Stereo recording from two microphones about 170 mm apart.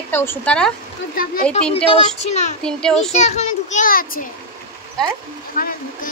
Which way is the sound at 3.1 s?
40° left (ahead or behind).